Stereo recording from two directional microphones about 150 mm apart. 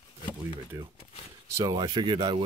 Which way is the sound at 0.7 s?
20° right (ahead or behind).